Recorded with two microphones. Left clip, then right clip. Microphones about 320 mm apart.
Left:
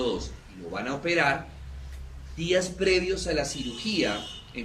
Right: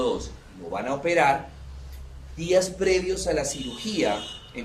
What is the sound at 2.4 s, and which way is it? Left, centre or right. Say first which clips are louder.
Speech: right 4 dB; centre.